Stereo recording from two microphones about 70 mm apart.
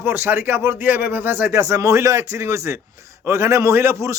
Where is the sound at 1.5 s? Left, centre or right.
Right.